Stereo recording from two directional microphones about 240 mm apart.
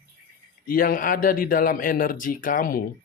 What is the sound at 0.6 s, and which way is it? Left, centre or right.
Speech, left.